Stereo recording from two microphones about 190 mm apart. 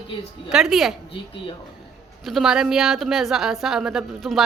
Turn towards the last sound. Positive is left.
turn(degrees=0)  # may be behind; listen again after turning